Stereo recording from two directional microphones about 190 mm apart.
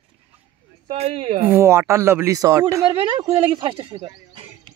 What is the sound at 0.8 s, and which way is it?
Speech, 30° right (ahead or behind).